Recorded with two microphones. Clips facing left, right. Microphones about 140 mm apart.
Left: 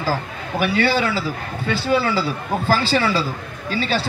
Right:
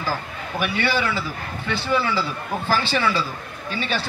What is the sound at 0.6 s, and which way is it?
Speech, 30° left (ahead or behind).